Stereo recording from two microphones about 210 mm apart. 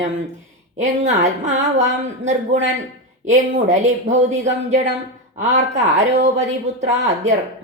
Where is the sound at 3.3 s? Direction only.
35° right (ahead or behind).